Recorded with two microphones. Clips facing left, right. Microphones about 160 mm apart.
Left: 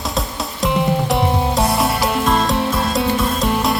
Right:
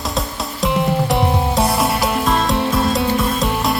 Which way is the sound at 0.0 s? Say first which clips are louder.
Even; centre (ahead or behind).